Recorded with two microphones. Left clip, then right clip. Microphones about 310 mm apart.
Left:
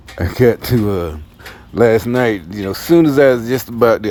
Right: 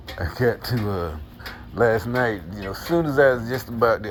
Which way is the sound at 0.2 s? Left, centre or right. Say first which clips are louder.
Left 10 dB; left.